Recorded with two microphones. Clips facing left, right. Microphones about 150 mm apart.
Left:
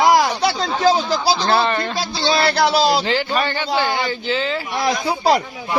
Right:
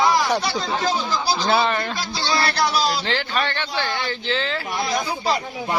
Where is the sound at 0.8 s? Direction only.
90° left.